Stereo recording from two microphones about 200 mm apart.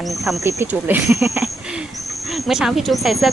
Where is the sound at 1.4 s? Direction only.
5° right (ahead or behind).